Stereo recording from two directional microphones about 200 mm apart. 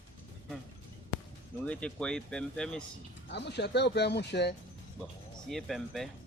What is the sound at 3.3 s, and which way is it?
Speech, 60° left (ahead or behind).